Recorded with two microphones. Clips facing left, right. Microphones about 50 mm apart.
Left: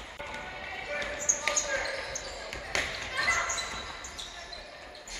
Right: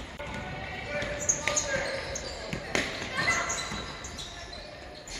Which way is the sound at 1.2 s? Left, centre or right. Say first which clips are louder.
Right 1 dB; centre.